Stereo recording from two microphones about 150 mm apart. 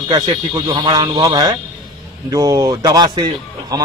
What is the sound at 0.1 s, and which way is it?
Speech, 30° right (ahead or behind).